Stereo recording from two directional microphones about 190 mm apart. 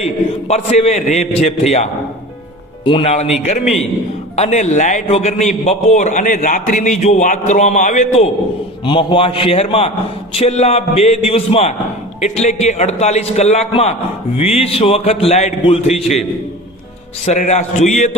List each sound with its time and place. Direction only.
0.0 s a man's voice: 35° left (ahead or behind)
2.8 s a man's voice: 30° left (ahead or behind)
8.8 s a man's voice: 25° left (ahead or behind)
17.2 s a man's voice: 40° left (ahead or behind)